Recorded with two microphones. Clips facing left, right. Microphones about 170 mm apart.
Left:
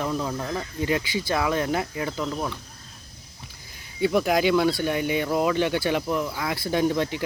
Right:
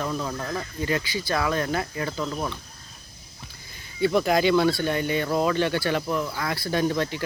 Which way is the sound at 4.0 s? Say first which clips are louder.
Even; 10° left (ahead or behind).